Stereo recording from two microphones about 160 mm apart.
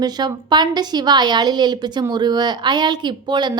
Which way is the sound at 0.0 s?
25° right (ahead or behind).